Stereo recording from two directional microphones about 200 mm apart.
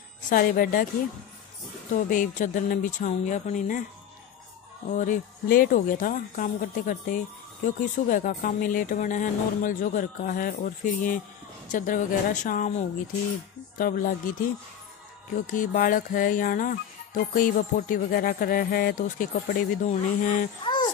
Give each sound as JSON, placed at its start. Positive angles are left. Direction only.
{"t": 0.3, "sound": "speech", "side_deg": 45}
{"t": 2.0, "sound": "speech", "side_deg": 40}
{"t": 4.8, "sound": "speech", "side_deg": 40}
{"t": 15.3, "sound": "speech", "side_deg": 40}
{"t": 20.6, "sound": "a sound", "side_deg": 20}